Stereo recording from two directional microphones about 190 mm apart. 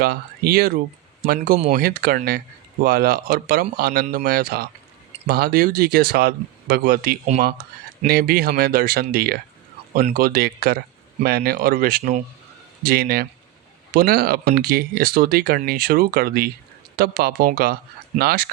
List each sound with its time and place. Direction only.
0.0 s speech: 55° right (ahead or behind)
12.8 s speech: 55° right (ahead or behind)